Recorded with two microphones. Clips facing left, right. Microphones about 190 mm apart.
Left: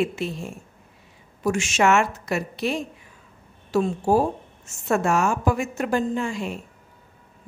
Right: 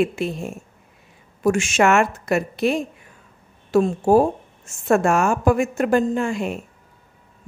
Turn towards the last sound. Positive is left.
turn(degrees=-55)  # may be behind; listen again after turning